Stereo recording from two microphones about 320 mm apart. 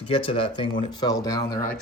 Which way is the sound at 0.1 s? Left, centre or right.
Centre.